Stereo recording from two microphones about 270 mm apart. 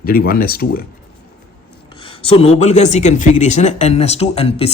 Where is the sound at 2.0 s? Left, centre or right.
Centre.